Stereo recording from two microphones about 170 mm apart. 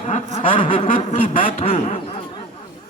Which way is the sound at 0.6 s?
30° left (ahead or behind).